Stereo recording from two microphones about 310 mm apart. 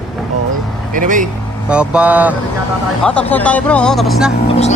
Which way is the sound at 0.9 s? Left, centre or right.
Right.